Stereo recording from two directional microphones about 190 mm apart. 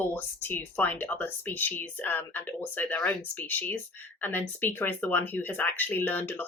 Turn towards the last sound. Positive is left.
turn(degrees=10)  # may be behind; listen again after turning